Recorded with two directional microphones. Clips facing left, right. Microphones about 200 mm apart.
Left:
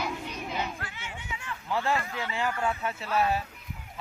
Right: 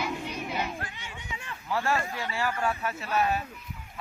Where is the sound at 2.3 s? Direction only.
20° left (ahead or behind).